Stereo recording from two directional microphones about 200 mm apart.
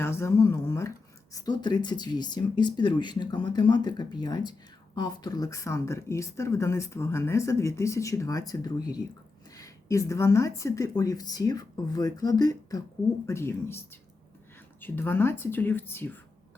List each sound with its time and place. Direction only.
0.0 s speech: 10° left (ahead or behind)